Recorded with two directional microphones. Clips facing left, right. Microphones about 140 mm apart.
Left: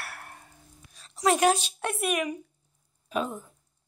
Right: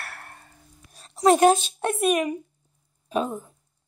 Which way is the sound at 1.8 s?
30° right (ahead or behind).